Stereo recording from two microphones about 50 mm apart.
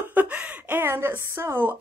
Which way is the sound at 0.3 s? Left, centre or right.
Right.